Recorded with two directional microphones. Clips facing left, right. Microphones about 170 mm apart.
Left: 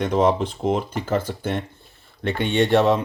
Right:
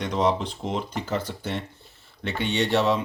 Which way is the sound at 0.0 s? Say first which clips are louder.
Left 5 dB; 55° left (ahead or behind).